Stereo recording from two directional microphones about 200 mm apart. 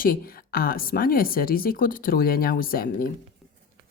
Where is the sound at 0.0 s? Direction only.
45° left (ahead or behind).